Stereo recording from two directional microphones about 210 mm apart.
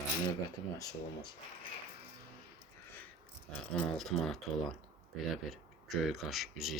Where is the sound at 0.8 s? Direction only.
15° left (ahead or behind).